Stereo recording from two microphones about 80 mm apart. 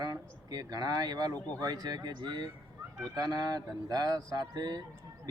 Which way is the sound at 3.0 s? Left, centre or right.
Right.